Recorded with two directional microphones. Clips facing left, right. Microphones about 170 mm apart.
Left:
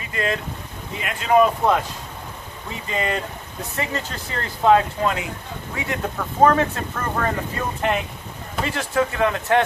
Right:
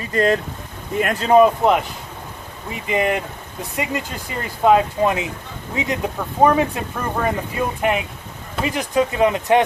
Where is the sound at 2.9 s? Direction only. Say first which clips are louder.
Right 5 dB; 15° right (ahead or behind).